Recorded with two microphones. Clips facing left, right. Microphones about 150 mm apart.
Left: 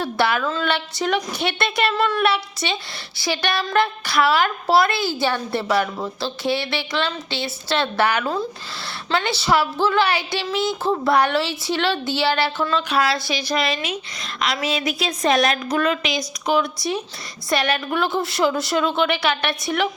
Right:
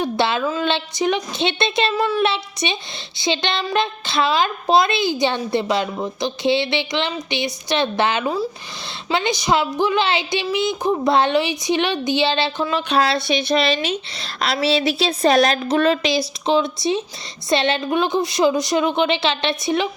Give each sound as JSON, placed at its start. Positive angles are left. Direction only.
{"t": 0.0, "sound": "a woman's voice", "side_deg": -20}